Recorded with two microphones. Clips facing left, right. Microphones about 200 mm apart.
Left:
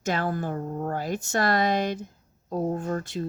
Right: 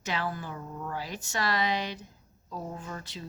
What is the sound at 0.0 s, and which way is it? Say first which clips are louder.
Speech: left 7 dB; 45° left (ahead or behind).